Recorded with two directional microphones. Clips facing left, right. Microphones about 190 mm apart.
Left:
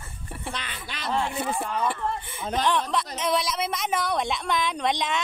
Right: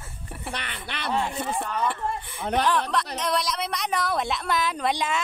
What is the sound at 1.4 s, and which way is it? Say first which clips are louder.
Speech: even; 5° left (ahead or behind).